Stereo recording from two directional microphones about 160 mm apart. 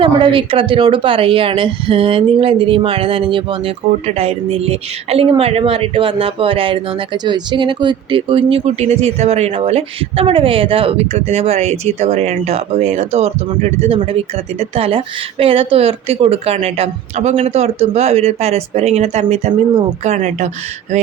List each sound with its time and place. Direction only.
0.0 s speech: 30° right (ahead or behind); by 20.5 s 50° right (ahead or behind)